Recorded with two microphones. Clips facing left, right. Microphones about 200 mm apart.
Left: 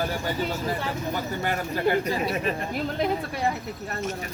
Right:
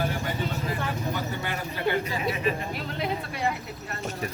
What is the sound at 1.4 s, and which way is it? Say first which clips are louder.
Speech: left 5 dB; 45° left (ahead or behind).